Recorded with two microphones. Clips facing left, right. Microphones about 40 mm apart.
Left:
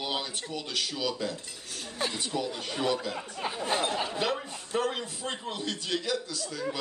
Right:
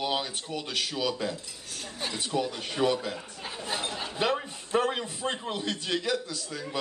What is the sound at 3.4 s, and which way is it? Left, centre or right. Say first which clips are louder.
Speech: left 5 dB; centre.